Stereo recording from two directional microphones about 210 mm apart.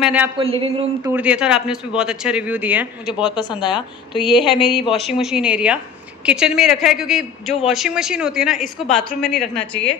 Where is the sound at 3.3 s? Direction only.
20° left (ahead or behind).